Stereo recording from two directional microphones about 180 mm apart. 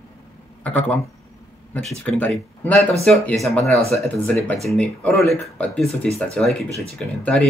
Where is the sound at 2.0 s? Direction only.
10° left (ahead or behind).